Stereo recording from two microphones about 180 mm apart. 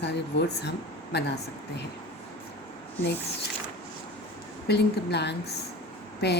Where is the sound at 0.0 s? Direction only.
70° left (ahead or behind).